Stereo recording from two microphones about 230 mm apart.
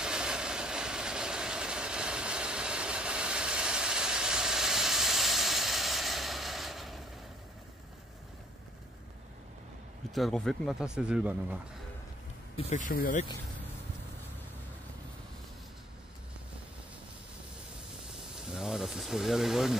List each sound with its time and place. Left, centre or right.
0.0 s vehicle: centre
10.1 s speech: centre
12.5 s speech: left
18.3 s a sound: centre